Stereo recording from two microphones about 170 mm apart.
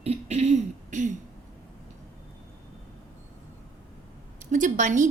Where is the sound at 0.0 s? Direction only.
40° right (ahead or behind).